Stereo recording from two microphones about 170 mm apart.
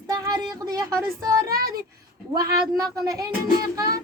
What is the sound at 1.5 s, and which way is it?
Child singing, 60° right (ahead or behind).